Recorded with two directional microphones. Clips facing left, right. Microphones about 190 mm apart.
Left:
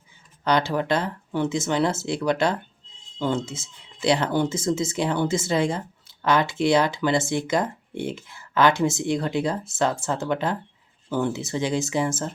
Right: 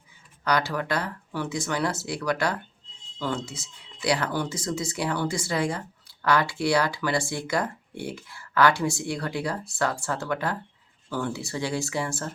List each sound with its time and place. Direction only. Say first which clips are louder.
0.4 s speech: left 4 dB; 25° left (ahead or behind)